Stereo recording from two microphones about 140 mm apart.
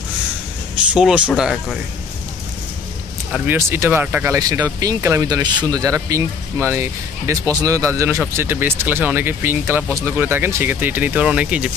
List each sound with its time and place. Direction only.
0.9 s speech: 5° right (ahead or behind)
3.3 s speech: 15° right (ahead or behind)
4.4 s speech: 25° right (ahead or behind); by 11.7 s 5° right (ahead or behind)